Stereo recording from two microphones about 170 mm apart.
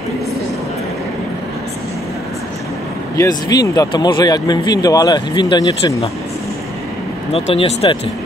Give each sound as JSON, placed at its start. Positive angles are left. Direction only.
{"t": 3.2, "sound": "speech", "side_deg": 20}
{"t": 7.3, "sound": "speech", "side_deg": 35}